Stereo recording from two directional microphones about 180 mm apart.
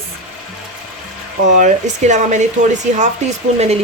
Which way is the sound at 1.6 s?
45° right (ahead or behind).